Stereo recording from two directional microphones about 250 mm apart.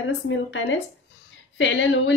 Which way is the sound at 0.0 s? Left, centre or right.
Left.